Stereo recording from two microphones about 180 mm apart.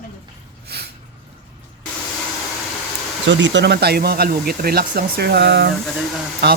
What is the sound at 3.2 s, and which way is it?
Speech, 90° right.